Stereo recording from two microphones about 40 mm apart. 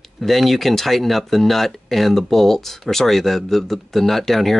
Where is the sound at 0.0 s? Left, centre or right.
Centre.